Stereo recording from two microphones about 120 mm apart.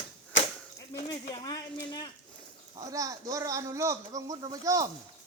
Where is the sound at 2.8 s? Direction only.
30° right (ahead or behind).